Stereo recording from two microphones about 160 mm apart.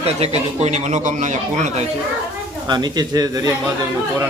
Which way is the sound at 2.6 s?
25° right (ahead or behind).